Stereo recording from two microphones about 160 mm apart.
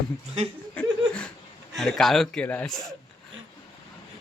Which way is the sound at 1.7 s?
Centre (ahead or behind).